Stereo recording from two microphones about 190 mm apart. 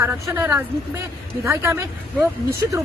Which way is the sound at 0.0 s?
10° right (ahead or behind).